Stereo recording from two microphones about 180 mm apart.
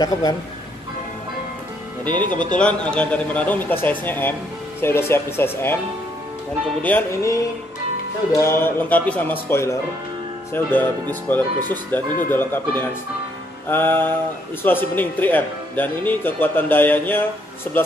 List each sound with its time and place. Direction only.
0.0 s speech: 20° left (ahead or behind)
2.5 s speech: 5° left (ahead or behind)
6.8 s speech: 10° left (ahead or behind)